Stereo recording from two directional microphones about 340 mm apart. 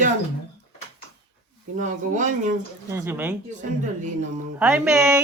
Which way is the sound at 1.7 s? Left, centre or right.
Right.